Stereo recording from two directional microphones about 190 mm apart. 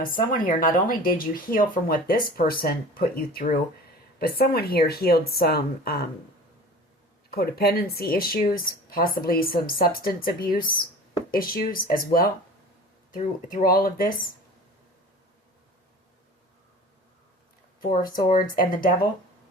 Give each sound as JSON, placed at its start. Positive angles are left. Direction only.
{"t": 0.0, "sound": "speech", "side_deg": 45}
{"t": 7.3, "sound": "speech", "side_deg": 55}
{"t": 13.5, "sound": "speech", "side_deg": 50}
{"t": 17.9, "sound": "speech", "side_deg": 45}